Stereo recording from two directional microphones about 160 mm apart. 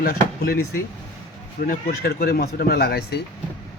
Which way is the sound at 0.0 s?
70° left (ahead or behind).